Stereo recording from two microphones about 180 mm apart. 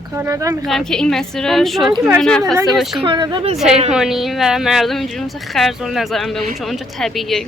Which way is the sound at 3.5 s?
Centre (ahead or behind).